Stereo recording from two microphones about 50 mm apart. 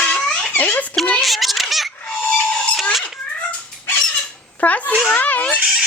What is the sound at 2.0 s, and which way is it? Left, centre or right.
Music, centre.